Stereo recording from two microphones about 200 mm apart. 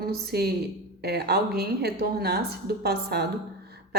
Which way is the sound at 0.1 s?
55° right (ahead or behind).